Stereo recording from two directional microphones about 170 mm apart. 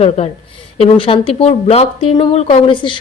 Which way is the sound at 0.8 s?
30° left (ahead or behind).